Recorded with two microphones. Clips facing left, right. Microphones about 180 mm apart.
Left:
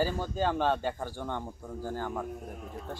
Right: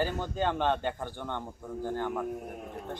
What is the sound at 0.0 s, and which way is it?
Speech, 10° left (ahead or behind).